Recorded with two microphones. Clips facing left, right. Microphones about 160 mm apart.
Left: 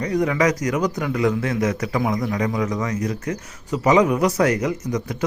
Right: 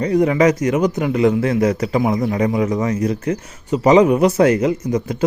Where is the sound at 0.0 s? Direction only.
30° right (ahead or behind).